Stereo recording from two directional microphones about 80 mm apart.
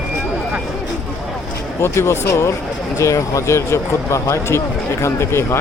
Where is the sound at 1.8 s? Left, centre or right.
Left.